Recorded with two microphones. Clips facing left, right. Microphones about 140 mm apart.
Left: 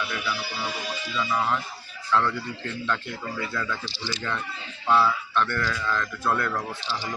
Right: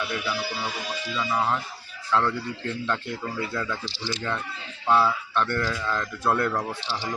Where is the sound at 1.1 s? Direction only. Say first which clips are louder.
Even; 20° right (ahead or behind).